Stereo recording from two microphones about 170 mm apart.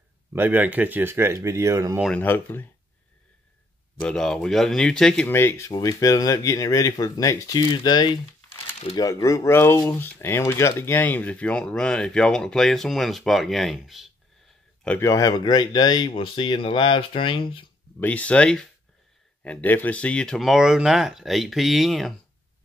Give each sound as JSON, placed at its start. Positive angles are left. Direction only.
{"t": 0.3, "sound": "speech", "side_deg": -10}
{"t": 2.1, "sound": "speech", "side_deg": 10}
{"t": 4.0, "sound": "speech", "side_deg": 5}
{"t": 5.3, "sound": "speech", "side_deg": 15}
{"t": 14.9, "sound": "speech", "side_deg": 15}
{"t": 18.0, "sound": "speech", "side_deg": 10}